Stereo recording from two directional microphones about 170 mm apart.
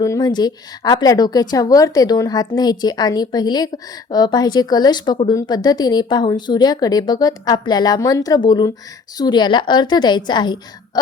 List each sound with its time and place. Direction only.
0.0 s a woman's voice: 20° left (ahead or behind)